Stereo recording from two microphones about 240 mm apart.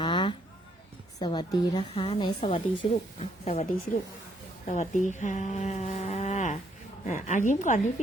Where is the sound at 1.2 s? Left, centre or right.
Centre.